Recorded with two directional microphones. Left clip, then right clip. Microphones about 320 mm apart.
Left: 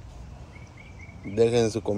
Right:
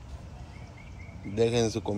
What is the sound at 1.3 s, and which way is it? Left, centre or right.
Speech, left.